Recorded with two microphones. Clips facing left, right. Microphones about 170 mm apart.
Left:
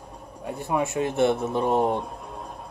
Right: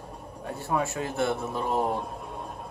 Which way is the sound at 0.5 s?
15° left (ahead or behind).